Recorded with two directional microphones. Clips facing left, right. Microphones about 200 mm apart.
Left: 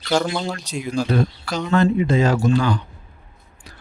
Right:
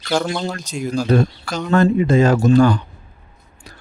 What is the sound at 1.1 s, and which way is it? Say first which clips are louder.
Speech: right 4 dB; 45° right (ahead or behind).